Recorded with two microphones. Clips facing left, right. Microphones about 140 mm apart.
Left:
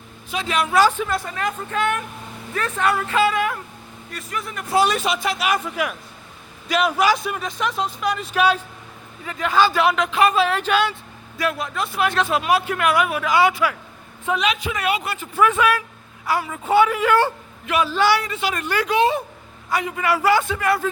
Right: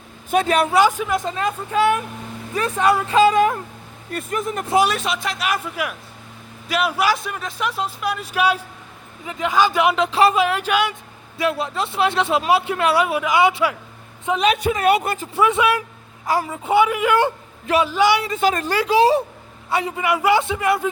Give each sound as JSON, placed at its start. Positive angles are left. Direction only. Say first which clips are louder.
{"t": 0.3, "sound": "a woman's voice", "louder": "right 7 dB", "side_deg": -50}
{"t": 0.7, "sound": "speech", "louder": "right 1 dB", "side_deg": -15}
{"t": 3.3, "sound": "a woman's voice", "louder": "right 6 dB", "side_deg": -30}
{"t": 4.1, "sound": "a woman's voice", "louder": "right 6 dB", "side_deg": -50}
{"t": 4.9, "sound": "speech", "louder": "left 2 dB", "side_deg": 0}
{"t": 10.3, "sound": "speech", "louder": "even", "side_deg": -10}
{"t": 11.3, "sound": "speech", "louder": "right 2 dB", "side_deg": -25}
{"t": 14.7, "sound": "a woman's voice", "louder": "right 6 dB", "side_deg": -35}
{"t": 15.4, "sound": "speech", "louder": "even", "side_deg": -20}
{"t": 16.2, "sound": "a woman's voice", "louder": "right 2 dB", "side_deg": -40}
{"t": 16.5, "sound": "speech", "louder": "left 1 dB", "side_deg": -15}
{"t": 18.3, "sound": "a woman's voice", "louder": "right 6 dB", "side_deg": -40}
{"t": 18.5, "sound": "a woman's voice", "louder": "right 3 dB", "side_deg": -30}
{"t": 20.0, "sound": "speech", "louder": "even", "side_deg": -20}